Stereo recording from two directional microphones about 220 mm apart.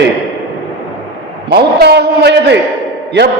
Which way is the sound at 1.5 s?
45° right (ahead or behind).